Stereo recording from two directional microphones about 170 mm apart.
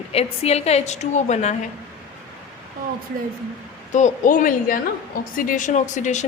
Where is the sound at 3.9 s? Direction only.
45° left (ahead or behind).